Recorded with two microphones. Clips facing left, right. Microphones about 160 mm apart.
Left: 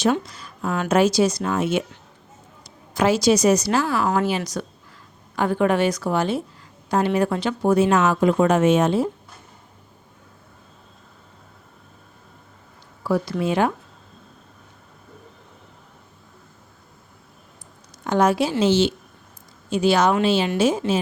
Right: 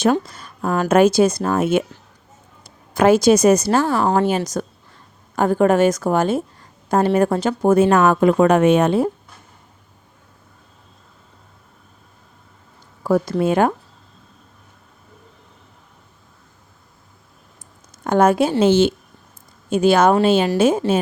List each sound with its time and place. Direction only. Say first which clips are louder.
0.6 s speech: right 5 dB; 35° right (ahead or behind)
0.9 s a woman's voice: right 4 dB; 55° right (ahead or behind)
3.8 s speech: right 4 dB; 30° right (ahead or behind)
4.3 s a woman's voice: right 4 dB; 45° right (ahead or behind)
13.0 s a woman's voice: right 5 dB; 45° right (ahead or behind)
18.0 s a woman's voice: right 4 dB; 50° right (ahead or behind)